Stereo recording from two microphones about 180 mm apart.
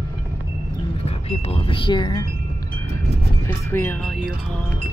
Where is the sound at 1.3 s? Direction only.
30° left (ahead or behind).